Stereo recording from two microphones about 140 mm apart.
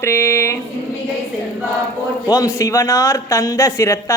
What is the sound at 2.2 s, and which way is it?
A man's voice, 25° left (ahead or behind).